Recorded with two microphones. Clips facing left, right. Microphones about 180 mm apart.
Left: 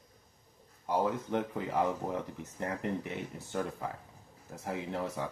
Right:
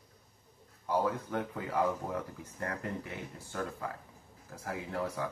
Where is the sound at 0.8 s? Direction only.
20° left (ahead or behind).